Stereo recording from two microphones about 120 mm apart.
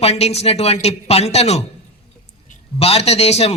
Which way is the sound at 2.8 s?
60° left (ahead or behind).